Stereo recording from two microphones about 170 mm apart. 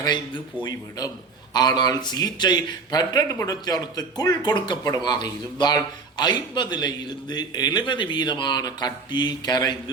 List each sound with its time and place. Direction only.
0.0 s a man's voice: 25° left (ahead or behind)